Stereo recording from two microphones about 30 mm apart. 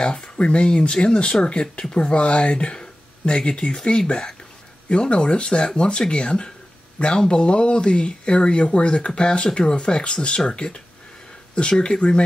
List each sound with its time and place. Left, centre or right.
0.0 s speech: left
5.0 s speech: left